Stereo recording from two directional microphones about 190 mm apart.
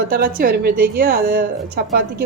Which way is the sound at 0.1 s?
50° right (ahead or behind).